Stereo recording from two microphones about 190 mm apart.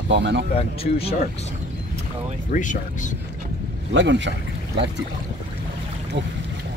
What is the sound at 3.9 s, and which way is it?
Speech, 70° right (ahead or behind).